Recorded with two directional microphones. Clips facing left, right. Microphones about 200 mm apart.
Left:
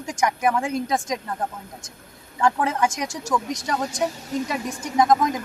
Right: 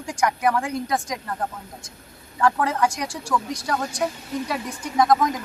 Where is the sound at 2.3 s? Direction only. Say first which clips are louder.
Even; 20° left (ahead or behind).